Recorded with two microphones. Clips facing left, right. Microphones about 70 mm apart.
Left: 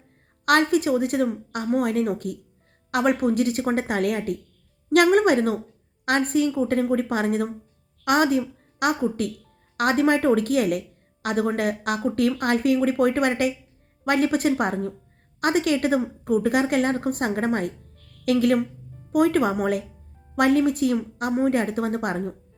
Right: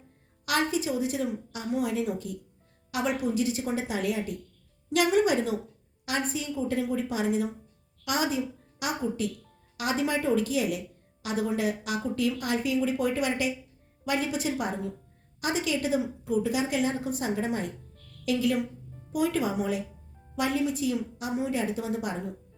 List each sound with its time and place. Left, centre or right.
0.4 s a woman's voice: left